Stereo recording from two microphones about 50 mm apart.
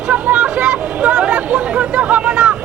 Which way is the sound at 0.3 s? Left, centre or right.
Right.